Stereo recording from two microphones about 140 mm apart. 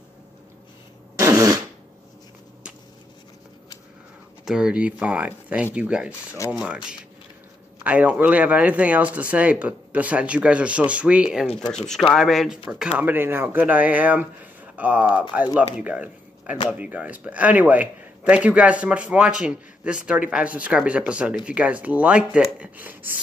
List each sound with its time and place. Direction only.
1.1 s fart: 20° right (ahead or behind)
4.5 s speech: 5° right (ahead or behind)
6.3 s speech: 20° left (ahead or behind)
6.6 s speech: 5° right (ahead or behind)